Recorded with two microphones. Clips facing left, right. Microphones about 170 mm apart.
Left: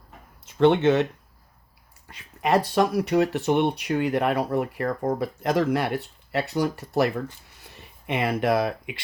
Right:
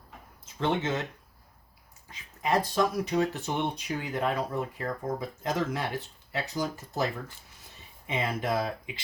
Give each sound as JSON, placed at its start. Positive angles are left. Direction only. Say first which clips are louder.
{"t": 0.4, "sound": "speech", "louder": "left 11 dB", "side_deg": 65}
{"t": 2.0, "sound": "speech", "louder": "left 5 dB", "side_deg": 65}